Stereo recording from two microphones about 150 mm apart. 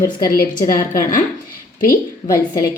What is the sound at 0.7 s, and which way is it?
Speech, 65° left (ahead or behind).